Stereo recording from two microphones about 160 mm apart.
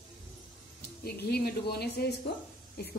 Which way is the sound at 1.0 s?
80° left.